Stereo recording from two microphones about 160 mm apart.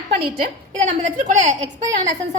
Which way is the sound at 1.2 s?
50° right (ahead or behind).